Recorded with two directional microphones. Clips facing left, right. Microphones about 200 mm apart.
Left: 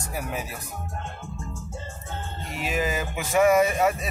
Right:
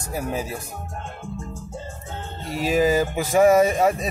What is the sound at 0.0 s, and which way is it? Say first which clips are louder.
Speech: right 5 dB; 25° right (ahead or behind).